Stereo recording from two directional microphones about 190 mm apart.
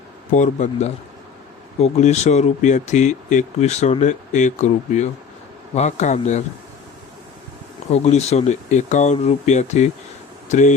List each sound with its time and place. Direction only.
0.3 s speech: 40° left (ahead or behind)
7.9 s speech: 35° left (ahead or behind)